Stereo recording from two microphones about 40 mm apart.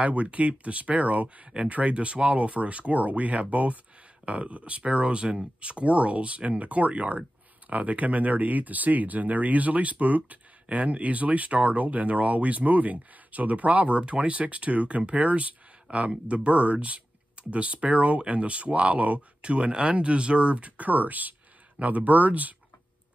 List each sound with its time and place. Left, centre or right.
0.0 s speech: right; by 5.5 s centre
5.6 s speech: right